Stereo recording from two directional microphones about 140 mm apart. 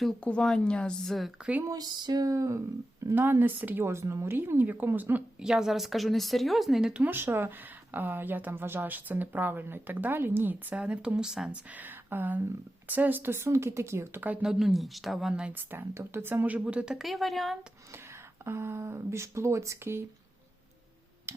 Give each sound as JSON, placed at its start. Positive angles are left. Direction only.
{"t": 0.0, "sound": "a woman's voice", "side_deg": 5}
{"t": 1.6, "sound": "speech", "side_deg": -25}
{"t": 18.4, "sound": "speech", "side_deg": -20}
{"t": 21.3, "sound": "a sound", "side_deg": -20}